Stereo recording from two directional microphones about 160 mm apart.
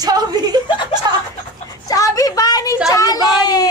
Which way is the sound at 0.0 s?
25° right (ahead or behind).